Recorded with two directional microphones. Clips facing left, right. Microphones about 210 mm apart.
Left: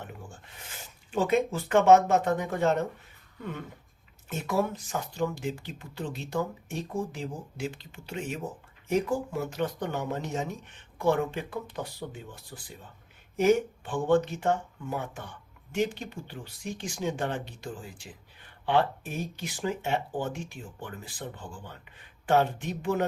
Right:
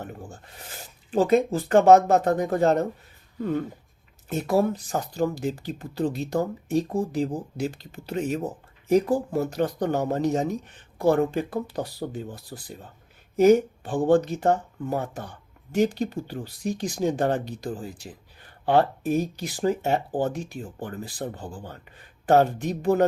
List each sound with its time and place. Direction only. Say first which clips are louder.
0.0 s a sound: right 6 dB; 40° right (ahead or behind)
1.1 s speech: right 5 dB; 35° right (ahead or behind)
4.3 s speech: right 6 dB; 35° right (ahead or behind)